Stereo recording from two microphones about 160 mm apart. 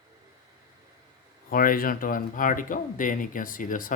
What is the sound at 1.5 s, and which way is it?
Speech, 60° left (ahead or behind).